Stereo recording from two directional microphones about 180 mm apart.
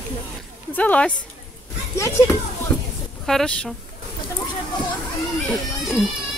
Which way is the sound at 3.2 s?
5° left (ahead or behind).